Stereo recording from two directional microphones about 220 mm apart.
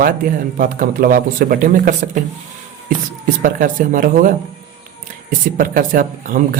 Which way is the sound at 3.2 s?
35° right (ahead or behind).